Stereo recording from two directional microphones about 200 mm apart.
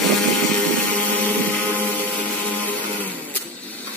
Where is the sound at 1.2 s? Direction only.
10° left (ahead or behind).